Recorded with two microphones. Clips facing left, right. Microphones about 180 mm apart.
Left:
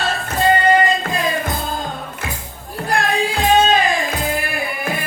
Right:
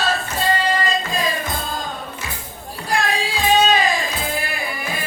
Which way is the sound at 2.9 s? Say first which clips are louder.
Left 3 dB; 55° left (ahead or behind).